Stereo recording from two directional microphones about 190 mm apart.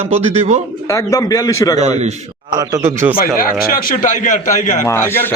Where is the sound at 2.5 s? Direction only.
20° right (ahead or behind).